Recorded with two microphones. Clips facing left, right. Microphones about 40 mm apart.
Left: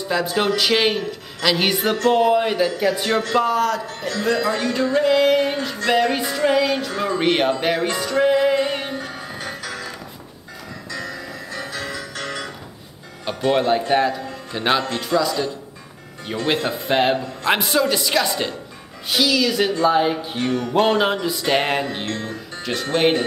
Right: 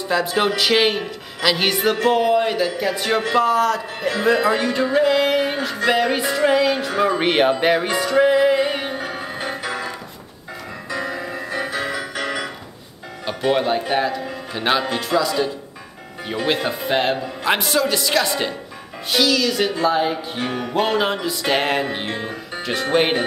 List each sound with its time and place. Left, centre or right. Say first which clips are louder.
0.0 s speech: right 1 dB; centre
4.1 s music: right 3 dB; centre
13.2 s speech: even; centre
21.8 s music: right 1 dB; centre